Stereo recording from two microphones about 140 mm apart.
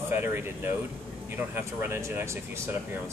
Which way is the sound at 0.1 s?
15° right (ahead or behind).